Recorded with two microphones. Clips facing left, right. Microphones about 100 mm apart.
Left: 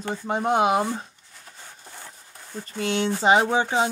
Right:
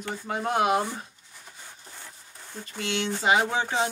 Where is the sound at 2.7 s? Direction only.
40° left (ahead or behind).